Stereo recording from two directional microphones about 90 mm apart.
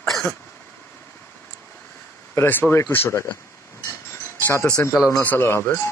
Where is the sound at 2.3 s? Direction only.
25° left (ahead or behind).